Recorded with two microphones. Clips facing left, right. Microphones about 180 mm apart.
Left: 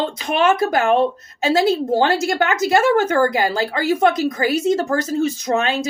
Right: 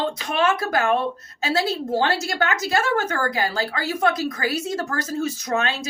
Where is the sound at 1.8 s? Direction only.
50° left (ahead or behind).